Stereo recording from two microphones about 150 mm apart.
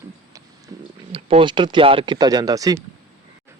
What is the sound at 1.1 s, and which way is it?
Speech, 35° right (ahead or behind).